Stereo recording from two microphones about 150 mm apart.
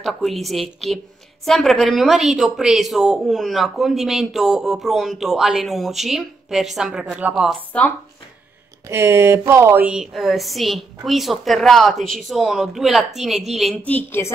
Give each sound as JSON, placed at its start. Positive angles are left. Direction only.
{"t": 0.0, "sound": "a woman's voice", "side_deg": 0}
{"t": 8.8, "sound": "a woman's voice", "side_deg": -15}
{"t": 13.8, "sound": "a woman's voice", "side_deg": 15}